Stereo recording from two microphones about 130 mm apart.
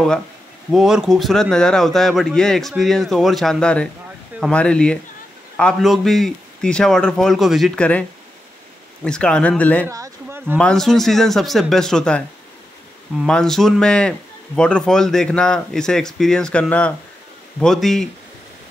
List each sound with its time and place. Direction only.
0.7 s a man's voice: 5° right (ahead or behind)
9.0 s speech: 5° left (ahead or behind)
9.8 s a sound: 25° right (ahead or behind)
10.6 s a man's voice: 5° left (ahead or behind)
13.3 s a man's voice: 5° left (ahead or behind)